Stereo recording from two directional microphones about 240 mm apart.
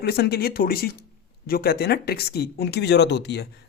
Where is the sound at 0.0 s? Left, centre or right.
Left.